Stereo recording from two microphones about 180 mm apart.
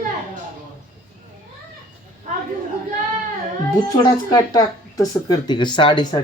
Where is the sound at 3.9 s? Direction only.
20° left (ahead or behind).